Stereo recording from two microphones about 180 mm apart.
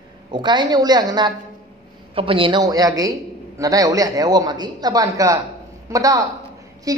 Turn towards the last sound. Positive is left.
turn(degrees=-20)  # may be behind; listen again after turning